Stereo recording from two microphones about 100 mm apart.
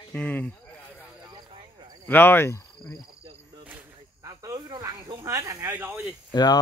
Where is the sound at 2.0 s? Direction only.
20° left (ahead or behind).